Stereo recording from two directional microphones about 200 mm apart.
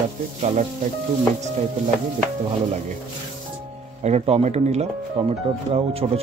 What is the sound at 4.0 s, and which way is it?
Speech, 30° right (ahead or behind).